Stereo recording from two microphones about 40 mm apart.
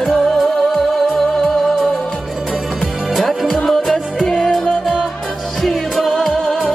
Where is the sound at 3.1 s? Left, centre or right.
Centre.